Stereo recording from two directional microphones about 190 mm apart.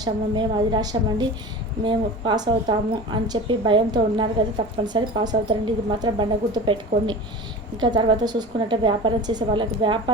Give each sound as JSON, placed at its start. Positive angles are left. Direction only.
{"t": 0.0, "sound": "a woman's voice", "side_deg": -20}